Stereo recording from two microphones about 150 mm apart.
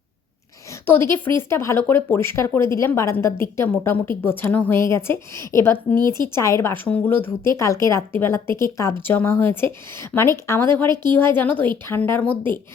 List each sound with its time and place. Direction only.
0.9 s speech: 15° left (ahead or behind)
6.0 s a woman's voice: 30° right (ahead or behind)
6.3 s speech: 20° left (ahead or behind)
10.8 s a woman's voice: 30° right (ahead or behind)
11.3 s speech: 10° left (ahead or behind)